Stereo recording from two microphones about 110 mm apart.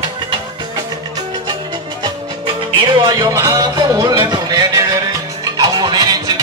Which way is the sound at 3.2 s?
30° right (ahead or behind).